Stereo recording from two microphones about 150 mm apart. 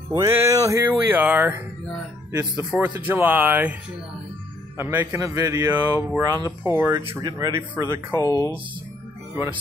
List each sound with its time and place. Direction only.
0.1 s speech: 20° right (ahead or behind)
2.8 s speech: 10° right (ahead or behind)
4.7 s speech: 15° right (ahead or behind)
5.7 s speech: 10° right (ahead or behind)
6.2 s speech: 20° right (ahead or behind)
8.1 s speech: 20° left (ahead or behind)